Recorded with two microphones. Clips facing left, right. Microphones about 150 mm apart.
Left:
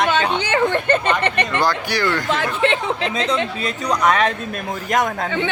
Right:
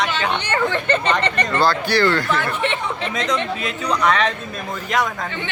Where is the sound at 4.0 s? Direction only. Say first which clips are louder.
Left 2 dB; 45° left (ahead or behind).